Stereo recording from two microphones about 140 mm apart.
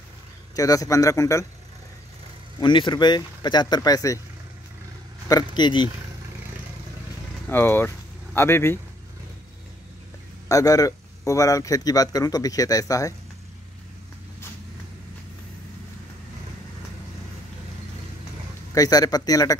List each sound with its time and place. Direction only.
0.6 s speech: 25° left (ahead or behind)
2.6 s speech: 35° left (ahead or behind)
5.3 s speech: 35° left (ahead or behind)
7.4 s speech: 15° left (ahead or behind)
10.5 s speech: 25° left (ahead or behind)
18.8 s speech: 25° left (ahead or behind)